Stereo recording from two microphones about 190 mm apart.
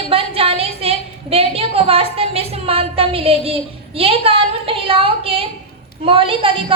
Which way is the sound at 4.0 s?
30° right (ahead or behind).